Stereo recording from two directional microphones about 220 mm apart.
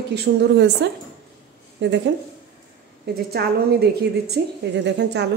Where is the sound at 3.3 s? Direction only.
45° right (ahead or behind).